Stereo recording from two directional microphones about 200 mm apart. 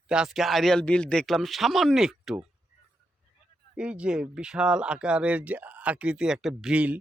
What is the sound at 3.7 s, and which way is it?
Speech, 5° right (ahead or behind).